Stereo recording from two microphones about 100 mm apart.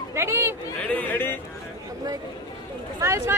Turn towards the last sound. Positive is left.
turn(degrees=-30)  # may be behind; listen again after turning